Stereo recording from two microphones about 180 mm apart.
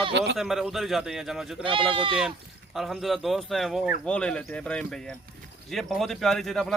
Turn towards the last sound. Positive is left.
turn(degrees=0)  # may be behind; listen again after turning